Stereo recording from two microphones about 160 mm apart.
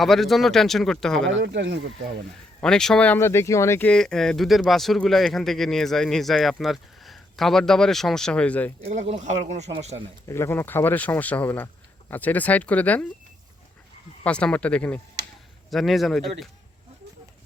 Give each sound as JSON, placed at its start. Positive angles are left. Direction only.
{"t": 0.0, "sound": "speech", "side_deg": 0}
{"t": 1.5, "sound": "speech", "side_deg": -90}
{"t": 2.6, "sound": "speech", "side_deg": 5}
{"t": 8.8, "sound": "speech", "side_deg": -40}
{"t": 10.2, "sound": "speech", "side_deg": 15}
{"t": 14.3, "sound": "speech", "side_deg": 5}